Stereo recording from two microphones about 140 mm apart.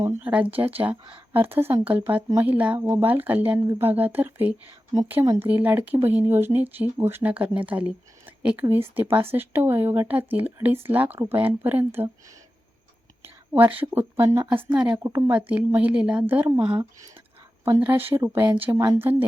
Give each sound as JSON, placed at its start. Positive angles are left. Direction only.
{"t": 0.2, "sound": "speech", "side_deg": -10}
{"t": 5.2, "sound": "speech", "side_deg": -25}
{"t": 5.5, "sound": "speech", "side_deg": -10}
{"t": 13.2, "sound": "whispering", "side_deg": -15}
{"t": 14.2, "sound": "speech", "side_deg": -15}
{"t": 14.9, "sound": "speech", "side_deg": -20}
{"t": 15.3, "sound": "speech", "side_deg": -10}
{"t": 17.7, "sound": "speech", "side_deg": -15}